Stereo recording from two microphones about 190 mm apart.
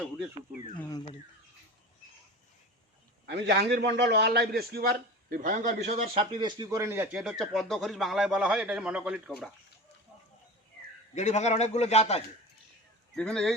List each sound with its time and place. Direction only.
0.9 s speech: 20° left (ahead or behind)
3.2 s a man's voice: 60° right (ahead or behind); by 6.2 s 40° right (ahead or behind)
6.4 s speech: 20° right (ahead or behind)
11.1 s a man's voice: 35° left (ahead or behind)
13.1 s speech: 5° left (ahead or behind)